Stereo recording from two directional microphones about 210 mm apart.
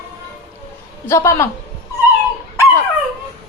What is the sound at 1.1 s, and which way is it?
Speech, 15° left (ahead or behind).